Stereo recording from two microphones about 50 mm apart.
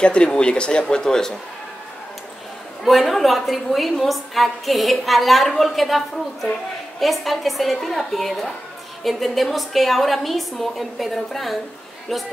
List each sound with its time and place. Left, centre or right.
0.0 s speech: centre
2.8 s a woman's voice: centre